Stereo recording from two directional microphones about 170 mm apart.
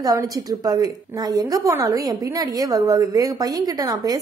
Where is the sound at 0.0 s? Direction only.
20° right (ahead or behind).